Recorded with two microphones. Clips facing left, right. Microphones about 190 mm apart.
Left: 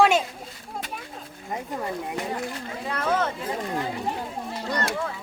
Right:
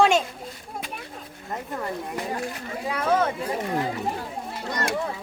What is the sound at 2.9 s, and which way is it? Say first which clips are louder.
Speech: right 2 dB; 10° right (ahead or behind).